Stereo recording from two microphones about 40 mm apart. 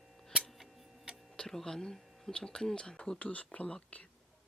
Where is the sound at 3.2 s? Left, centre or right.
Left.